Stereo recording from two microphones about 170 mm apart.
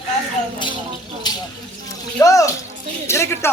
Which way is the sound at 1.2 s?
25° left (ahead or behind).